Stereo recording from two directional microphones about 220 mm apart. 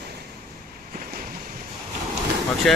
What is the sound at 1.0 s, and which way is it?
Boat, 40° right (ahead or behind).